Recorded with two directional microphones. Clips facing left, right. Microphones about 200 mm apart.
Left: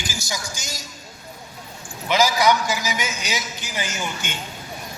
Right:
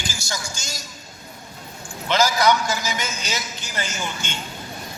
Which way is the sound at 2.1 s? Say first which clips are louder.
Even; 15° left (ahead or behind).